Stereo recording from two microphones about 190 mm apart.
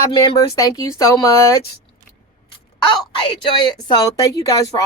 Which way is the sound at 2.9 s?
25° left (ahead or behind).